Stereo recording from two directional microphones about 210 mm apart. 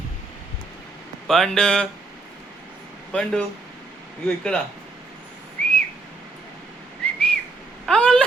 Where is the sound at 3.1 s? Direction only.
5° left (ahead or behind).